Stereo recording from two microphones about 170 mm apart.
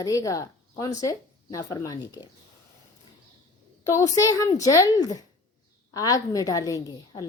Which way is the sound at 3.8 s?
20° left (ahead or behind).